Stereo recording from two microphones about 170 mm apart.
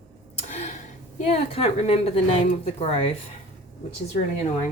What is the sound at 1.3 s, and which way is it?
A woman's voice, 40° left (ahead or behind).